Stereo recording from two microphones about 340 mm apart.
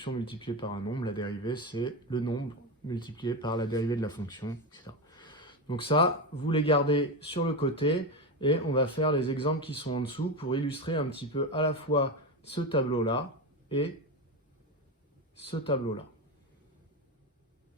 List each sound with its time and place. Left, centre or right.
0.0 s speech: centre
15.4 s speech: centre